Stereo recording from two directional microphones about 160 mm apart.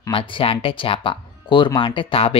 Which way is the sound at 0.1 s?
35° left (ahead or behind).